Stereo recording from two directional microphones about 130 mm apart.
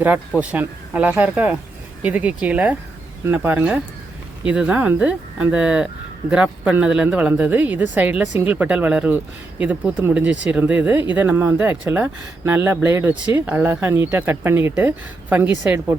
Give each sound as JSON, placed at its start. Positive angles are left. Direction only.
{"t": 0.3, "sound": "speech", "side_deg": -10}